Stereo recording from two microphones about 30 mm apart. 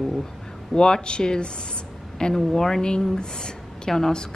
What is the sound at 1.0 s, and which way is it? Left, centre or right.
A woman's voice, left.